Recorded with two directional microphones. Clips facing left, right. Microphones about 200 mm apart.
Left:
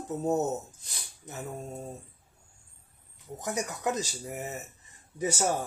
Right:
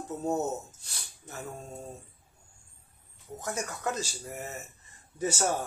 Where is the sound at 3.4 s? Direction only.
15° left (ahead or behind).